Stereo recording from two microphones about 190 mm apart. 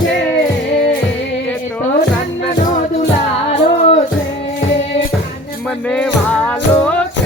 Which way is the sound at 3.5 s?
35° left (ahead or behind).